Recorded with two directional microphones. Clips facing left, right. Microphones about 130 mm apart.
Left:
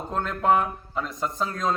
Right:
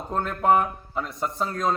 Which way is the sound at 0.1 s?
10° right (ahead or behind).